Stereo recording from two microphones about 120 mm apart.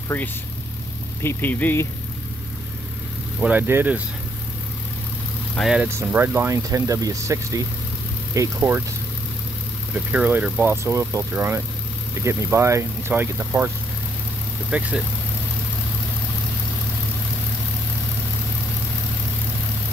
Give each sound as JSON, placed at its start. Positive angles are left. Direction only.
{"t": 0.1, "sound": "speech", "side_deg": 15}
{"t": 3.3, "sound": "speech", "side_deg": -15}
{"t": 5.8, "sound": "speech", "side_deg": -20}
{"t": 9.9, "sound": "speech", "side_deg": -10}
{"t": 10.7, "sound": "speech", "side_deg": -20}
{"t": 14.7, "sound": "speech", "side_deg": -10}